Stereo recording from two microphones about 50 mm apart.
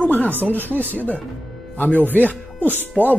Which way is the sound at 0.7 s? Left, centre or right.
Right.